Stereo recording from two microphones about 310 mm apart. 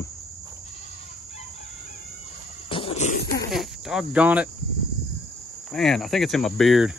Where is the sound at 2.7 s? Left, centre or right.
Centre.